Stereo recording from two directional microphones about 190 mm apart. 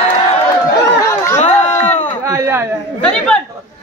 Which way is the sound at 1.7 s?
35° left (ahead or behind).